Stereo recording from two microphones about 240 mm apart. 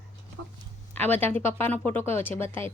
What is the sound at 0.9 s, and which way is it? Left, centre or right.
Speech, centre.